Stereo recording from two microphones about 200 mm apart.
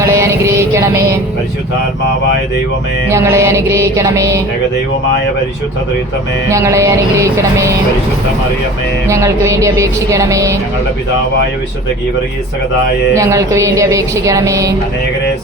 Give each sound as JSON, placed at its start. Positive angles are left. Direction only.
{"t": 0.0, "sound": "music", "side_deg": -15}
{"t": 3.1, "sound": "music", "side_deg": -15}
{"t": 6.5, "sound": "music", "side_deg": -15}
{"t": 9.0, "sound": "music", "side_deg": -15}
{"t": 13.1, "sound": "music", "side_deg": -15}